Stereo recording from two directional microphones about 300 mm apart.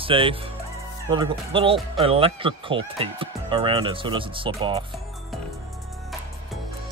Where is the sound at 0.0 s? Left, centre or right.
Centre.